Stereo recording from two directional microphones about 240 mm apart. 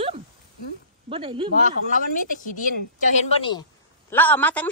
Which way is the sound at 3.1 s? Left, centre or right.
Left.